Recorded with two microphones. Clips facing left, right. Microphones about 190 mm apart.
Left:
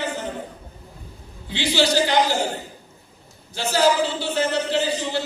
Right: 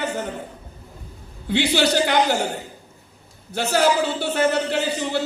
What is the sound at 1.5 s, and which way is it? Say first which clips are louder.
Speech: right 2 dB; 55° right (ahead or behind).